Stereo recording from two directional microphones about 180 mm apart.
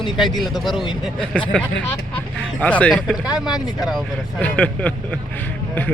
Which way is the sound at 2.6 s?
10° left (ahead or behind).